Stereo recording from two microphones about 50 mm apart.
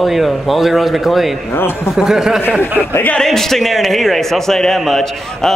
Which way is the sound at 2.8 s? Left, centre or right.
Right.